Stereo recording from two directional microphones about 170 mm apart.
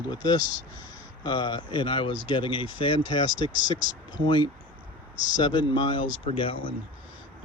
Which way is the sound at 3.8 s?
90° left.